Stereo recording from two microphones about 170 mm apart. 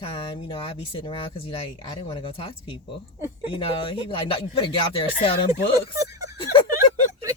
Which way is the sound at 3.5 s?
30° left (ahead or behind).